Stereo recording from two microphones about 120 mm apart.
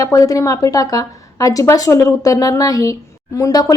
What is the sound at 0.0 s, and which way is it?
A woman's voice, 30° left (ahead or behind).